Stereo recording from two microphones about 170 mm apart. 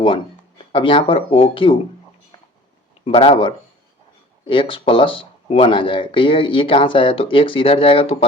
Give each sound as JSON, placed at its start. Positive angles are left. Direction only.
{"t": 0.6, "sound": "speech", "side_deg": 30}
{"t": 3.0, "sound": "speech", "side_deg": 35}